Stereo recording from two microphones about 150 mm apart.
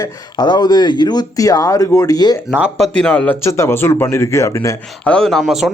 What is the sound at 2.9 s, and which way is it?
Speech, 10° left (ahead or behind).